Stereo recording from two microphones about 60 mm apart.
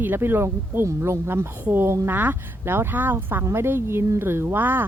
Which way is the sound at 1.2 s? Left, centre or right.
Right.